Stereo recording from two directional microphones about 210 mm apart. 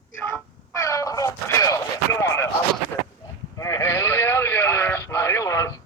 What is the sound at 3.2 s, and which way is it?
Sheep, 15° left (ahead or behind).